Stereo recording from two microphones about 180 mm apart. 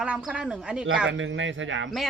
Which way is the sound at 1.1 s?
90° right.